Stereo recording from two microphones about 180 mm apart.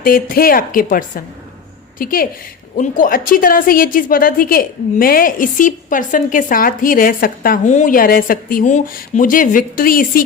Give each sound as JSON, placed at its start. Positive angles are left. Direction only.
{"t": 0.0, "sound": "a woman's voice", "side_deg": 55}